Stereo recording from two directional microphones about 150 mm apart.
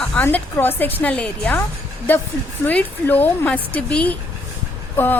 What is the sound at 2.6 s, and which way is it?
A woman's voice, 10° left (ahead or behind).